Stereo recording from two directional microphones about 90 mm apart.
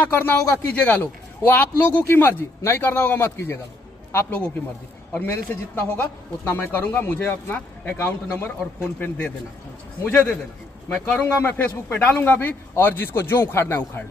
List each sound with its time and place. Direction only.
0.1 s a man's voice: 25° left (ahead or behind)